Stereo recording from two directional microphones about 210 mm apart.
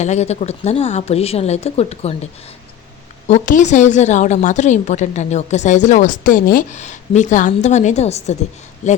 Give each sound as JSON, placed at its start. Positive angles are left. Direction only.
{"t": 0.0, "sound": "a woman's voice", "side_deg": 35}
{"t": 3.2, "sound": "a woman's voice", "side_deg": 35}